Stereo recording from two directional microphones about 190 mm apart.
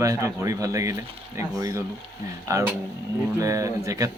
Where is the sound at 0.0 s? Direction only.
15° right (ahead or behind).